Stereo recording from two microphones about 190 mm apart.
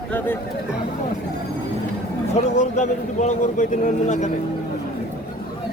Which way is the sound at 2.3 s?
40° left (ahead or behind).